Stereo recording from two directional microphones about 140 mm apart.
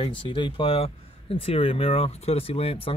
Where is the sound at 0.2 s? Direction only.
35° left (ahead or behind).